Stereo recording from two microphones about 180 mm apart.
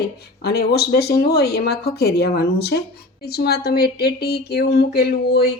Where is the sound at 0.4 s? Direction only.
60° left (ahead or behind).